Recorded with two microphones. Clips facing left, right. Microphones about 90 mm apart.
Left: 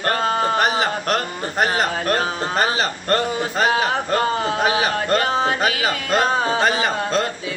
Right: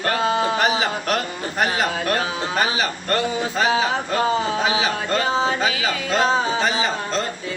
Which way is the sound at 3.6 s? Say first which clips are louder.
Left 1 dB; 55° left (ahead or behind).